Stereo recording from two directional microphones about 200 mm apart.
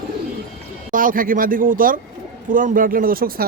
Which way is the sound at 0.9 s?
45° right (ahead or behind).